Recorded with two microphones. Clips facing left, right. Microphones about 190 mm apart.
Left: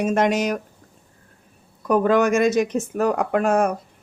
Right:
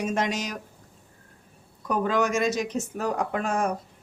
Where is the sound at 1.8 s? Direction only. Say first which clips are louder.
Left 7 dB; 60° left (ahead or behind).